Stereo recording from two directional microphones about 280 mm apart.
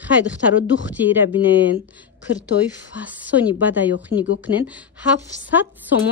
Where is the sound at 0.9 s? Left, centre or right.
Centre.